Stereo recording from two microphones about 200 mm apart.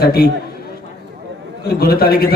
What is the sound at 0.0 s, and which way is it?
Speech, 50° left (ahead or behind).